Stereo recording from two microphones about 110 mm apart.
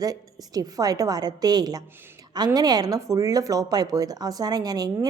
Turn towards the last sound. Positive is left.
turn(degrees=-35)  # may be behind; listen again after turning